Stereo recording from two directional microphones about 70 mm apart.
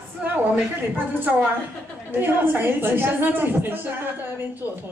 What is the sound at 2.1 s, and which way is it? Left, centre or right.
Speech, right.